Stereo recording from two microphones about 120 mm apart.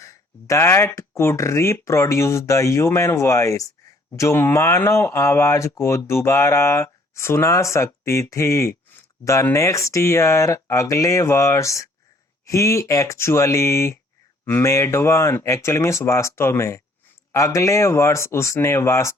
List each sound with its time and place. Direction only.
0.0 s speech: 25° left (ahead or behind)